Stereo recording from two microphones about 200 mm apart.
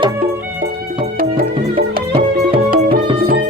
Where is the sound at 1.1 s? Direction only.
50° right (ahead or behind).